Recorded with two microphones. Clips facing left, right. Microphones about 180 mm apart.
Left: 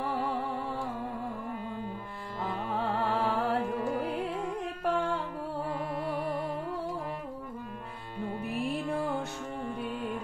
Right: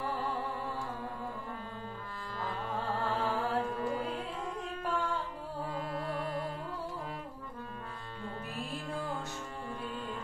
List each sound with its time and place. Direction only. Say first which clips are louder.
2.8 s music: left 4 dB; 70° left (ahead or behind)
4.8 s music: left 5 dB; 60° left (ahead or behind)
8.5 s music: left 9 dB; 60° left (ahead or behind)